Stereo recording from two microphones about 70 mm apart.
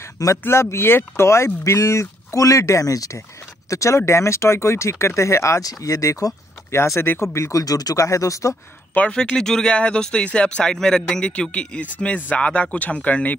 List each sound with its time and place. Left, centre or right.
0.0 s a sound: left
0.4 s speech: left
6.8 s speech: left
7.5 s speech: left
8.9 s speech: centre